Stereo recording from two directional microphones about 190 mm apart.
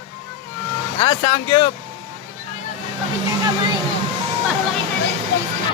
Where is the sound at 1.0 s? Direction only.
30° left (ahead or behind).